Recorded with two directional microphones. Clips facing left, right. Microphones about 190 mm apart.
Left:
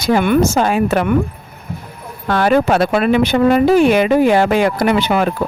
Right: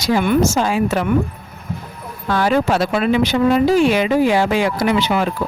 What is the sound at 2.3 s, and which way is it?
Speech, 60° left (ahead or behind).